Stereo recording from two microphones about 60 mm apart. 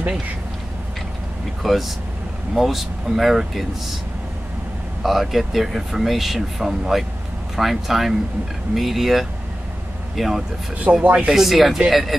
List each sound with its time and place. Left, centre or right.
1.6 s speech: centre
5.0 s speech: centre
10.8 s speech: right
11.3 s speech: centre